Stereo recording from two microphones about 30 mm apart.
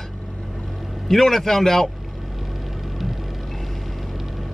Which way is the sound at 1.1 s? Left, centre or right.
Centre.